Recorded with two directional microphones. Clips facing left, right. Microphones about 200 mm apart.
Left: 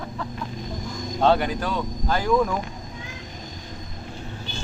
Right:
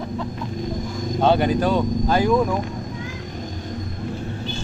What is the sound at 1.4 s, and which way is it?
Speech, 25° right (ahead or behind).